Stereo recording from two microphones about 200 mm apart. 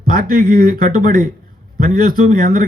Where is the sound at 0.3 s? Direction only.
45° right (ahead or behind).